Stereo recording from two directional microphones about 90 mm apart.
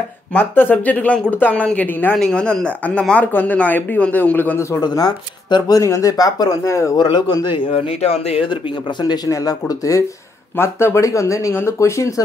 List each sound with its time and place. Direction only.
0.3 s speech: 20° left (ahead or behind)
2.1 s speech: 10° left (ahead or behind)
4.6 s speech: 35° left (ahead or behind)
4.8 s speech: 50° left (ahead or behind); by 7.0 s 35° left (ahead or behind)
7.0 s a man's voice: 60° left (ahead or behind); by 8.5 s 85° left
9.0 s speech: 50° left (ahead or behind)
10.5 s speech: 25° left (ahead or behind)